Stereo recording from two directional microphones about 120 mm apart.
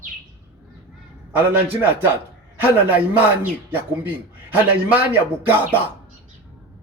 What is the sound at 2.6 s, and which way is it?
A man's voice, 15° right (ahead or behind).